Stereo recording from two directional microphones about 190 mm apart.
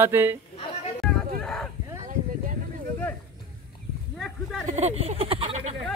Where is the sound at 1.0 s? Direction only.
Centre (ahead or behind).